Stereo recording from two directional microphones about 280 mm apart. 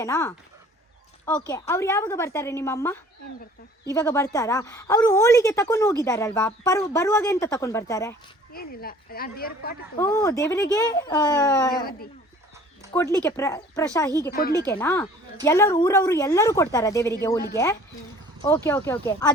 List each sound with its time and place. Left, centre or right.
0.0 s speech: centre
8.5 s a woman's voice: left
10.0 s speech: centre
12.9 s speech: centre